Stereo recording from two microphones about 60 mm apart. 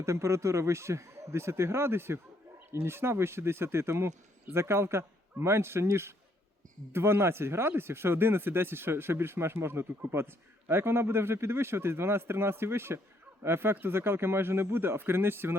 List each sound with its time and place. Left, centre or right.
0.0 s a man's voice: right